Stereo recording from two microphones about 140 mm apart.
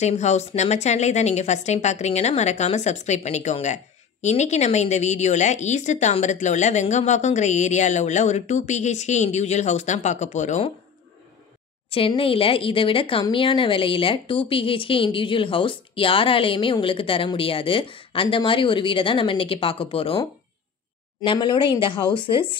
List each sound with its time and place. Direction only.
0.0 s a woman's voice: 55° left (ahead or behind)
11.9 s speech: 40° left (ahead or behind)